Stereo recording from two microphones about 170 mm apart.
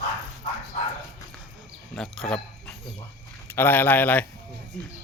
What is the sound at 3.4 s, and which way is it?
Speech, 10° left (ahead or behind).